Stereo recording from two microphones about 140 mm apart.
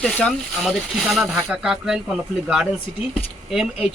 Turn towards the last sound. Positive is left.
turn(degrees=-5)  # may be behind; listen again after turning